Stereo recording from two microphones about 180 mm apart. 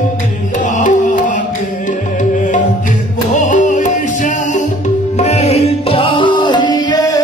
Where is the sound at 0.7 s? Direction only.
45° left (ahead or behind).